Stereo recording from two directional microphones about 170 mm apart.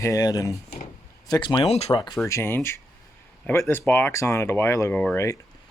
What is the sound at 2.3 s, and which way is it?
Speech, 15° left (ahead or behind).